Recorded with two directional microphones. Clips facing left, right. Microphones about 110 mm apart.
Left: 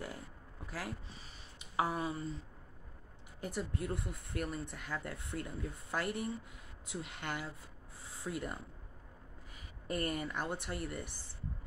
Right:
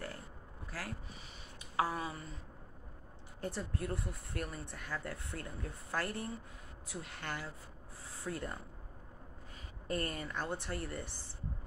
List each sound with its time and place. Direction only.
0.7 s speech: 15° left (ahead or behind)
3.3 s speech: 15° left (ahead or behind)
9.8 s speech: 15° left (ahead or behind)